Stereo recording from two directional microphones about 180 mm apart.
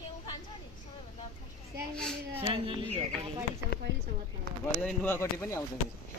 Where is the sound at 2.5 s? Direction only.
30° right (ahead or behind).